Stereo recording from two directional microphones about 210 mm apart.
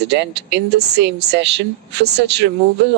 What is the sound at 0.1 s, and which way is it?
Speech, 55° right (ahead or behind).